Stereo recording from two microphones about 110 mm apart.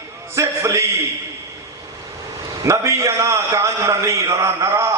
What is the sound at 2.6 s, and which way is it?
A man's voice, 25° right (ahead or behind).